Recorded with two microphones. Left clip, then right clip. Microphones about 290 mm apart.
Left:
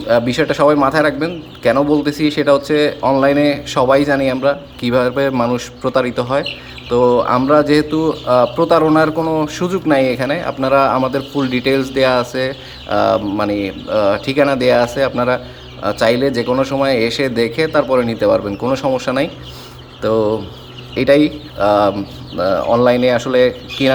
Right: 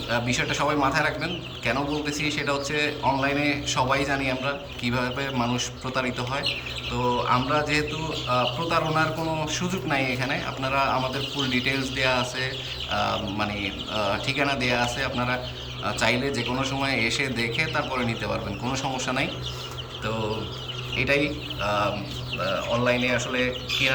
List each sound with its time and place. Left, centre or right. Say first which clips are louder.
0.1 s speech: left 12 dB; centre